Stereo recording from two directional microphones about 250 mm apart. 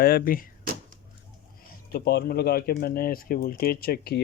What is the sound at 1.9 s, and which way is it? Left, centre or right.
Speech, left.